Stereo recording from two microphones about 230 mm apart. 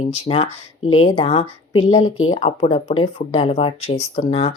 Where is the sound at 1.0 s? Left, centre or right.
Left.